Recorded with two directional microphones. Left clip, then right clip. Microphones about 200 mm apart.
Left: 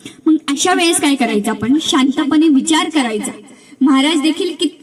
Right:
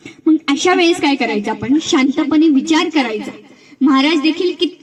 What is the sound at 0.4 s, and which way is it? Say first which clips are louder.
Speech: right 1 dB; 40° left (ahead or behind).